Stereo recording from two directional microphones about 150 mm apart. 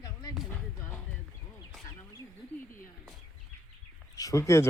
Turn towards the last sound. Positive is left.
turn(degrees=20)  # may be behind; listen again after turning